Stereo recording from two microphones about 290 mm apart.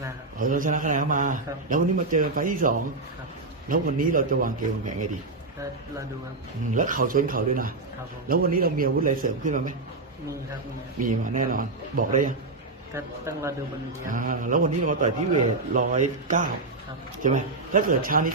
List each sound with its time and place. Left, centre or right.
0.4 s a man's voice: right
6.7 s a man's voice: right
11.0 s a man's voice: right
12.9 s speech: centre
14.1 s a man's voice: right